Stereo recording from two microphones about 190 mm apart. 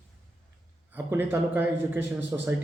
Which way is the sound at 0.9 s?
10° right (ahead or behind).